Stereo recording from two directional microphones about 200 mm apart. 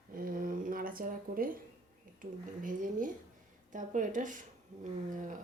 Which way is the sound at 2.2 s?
45° right (ahead or behind).